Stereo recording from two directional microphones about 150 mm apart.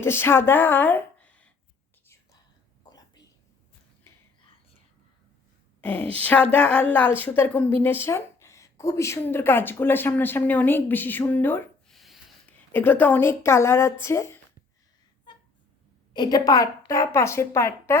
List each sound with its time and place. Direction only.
0.0 s a woman's voice: 15° left (ahead or behind)
5.8 s a woman's voice: 10° left (ahead or behind)
11.9 s a sound: centre (ahead or behind)
12.5 s a woman's voice: 15° left (ahead or behind)
16.1 s a woman's voice: 25° left (ahead or behind)